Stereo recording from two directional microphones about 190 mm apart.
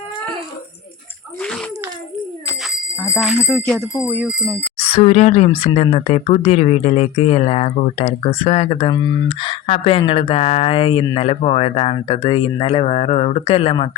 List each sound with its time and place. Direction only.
3.2 s speech: centre (ahead or behind)
4.9 s speech: 35° left (ahead or behind)